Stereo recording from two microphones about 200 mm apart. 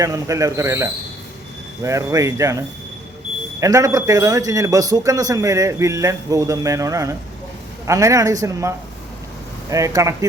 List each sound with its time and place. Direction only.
0.0 s speech: 15° right (ahead or behind)